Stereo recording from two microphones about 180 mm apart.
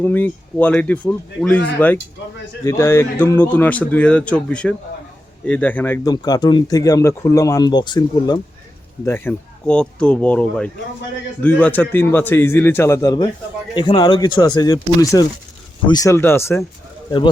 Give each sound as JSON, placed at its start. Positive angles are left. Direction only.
{"t": 0.0, "sound": "speech", "side_deg": 10}
{"t": 9.0, "sound": "speech", "side_deg": 10}